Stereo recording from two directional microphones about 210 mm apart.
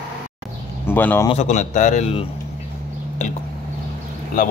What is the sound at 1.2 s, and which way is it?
A man's voice, 30° left (ahead or behind).